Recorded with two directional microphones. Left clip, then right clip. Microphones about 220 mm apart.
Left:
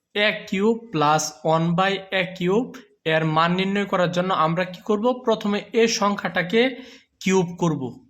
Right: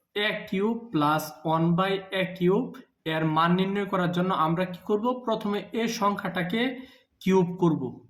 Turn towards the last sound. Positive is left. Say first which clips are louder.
# left 2 dB
turn(degrees=35)  # may be behind; listen again after turning